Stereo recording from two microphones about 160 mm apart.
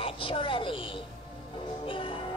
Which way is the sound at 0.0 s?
35° left (ahead or behind).